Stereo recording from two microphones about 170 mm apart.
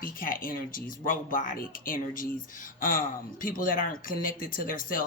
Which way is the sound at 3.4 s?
55° left (ahead or behind).